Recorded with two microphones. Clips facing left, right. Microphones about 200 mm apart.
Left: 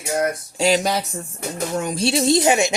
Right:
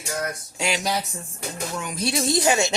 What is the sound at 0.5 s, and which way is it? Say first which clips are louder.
Speech: left 9 dB; 35° left (ahead or behind).